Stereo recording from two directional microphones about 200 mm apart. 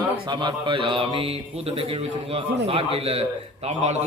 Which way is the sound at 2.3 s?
30° right (ahead or behind).